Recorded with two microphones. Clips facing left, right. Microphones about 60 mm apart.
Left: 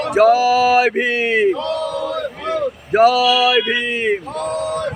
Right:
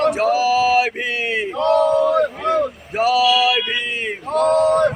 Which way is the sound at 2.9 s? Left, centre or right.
Left.